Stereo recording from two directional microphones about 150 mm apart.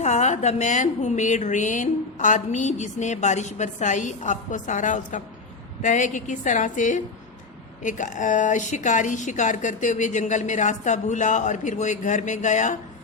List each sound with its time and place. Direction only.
0.0 s a woman's voice: 50° left (ahead or behind)